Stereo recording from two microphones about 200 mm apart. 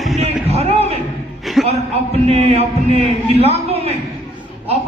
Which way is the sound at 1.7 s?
30° right (ahead or behind).